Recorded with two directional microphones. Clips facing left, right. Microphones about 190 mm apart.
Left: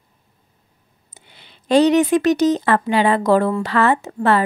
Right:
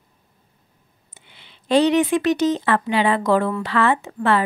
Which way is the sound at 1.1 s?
40° left (ahead or behind).